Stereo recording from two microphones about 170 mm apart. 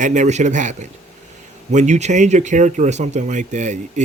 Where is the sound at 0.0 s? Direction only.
45° right (ahead or behind).